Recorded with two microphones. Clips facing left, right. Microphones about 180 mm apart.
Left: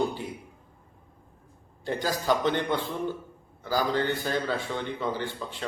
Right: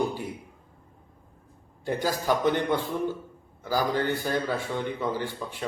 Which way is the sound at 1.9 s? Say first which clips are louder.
Right 1 dB; 10° right (ahead or behind).